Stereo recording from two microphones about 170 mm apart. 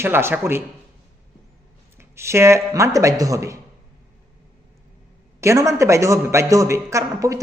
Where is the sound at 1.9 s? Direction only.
15° right (ahead or behind).